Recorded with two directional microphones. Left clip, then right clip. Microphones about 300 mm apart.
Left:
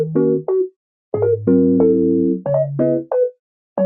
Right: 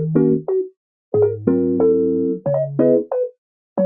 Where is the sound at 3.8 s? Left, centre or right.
Centre.